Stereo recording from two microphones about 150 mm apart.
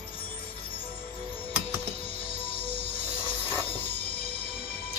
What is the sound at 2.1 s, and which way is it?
Music, 35° left (ahead or behind).